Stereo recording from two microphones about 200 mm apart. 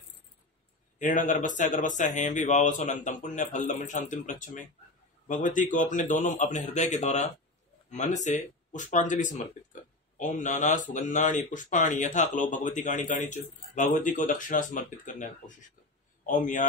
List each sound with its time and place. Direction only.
0.9 s speech: 40° left (ahead or behind)